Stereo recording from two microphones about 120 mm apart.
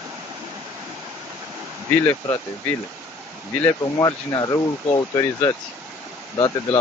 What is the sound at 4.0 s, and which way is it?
Speech, 35° left (ahead or behind).